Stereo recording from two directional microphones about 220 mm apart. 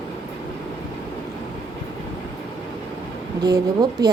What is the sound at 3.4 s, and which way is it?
Speech, 15° right (ahead or behind).